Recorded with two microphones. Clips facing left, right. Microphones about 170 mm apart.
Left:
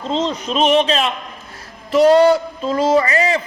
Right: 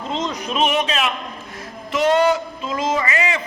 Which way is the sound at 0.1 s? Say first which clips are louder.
Left 5 dB; 30° left (ahead or behind).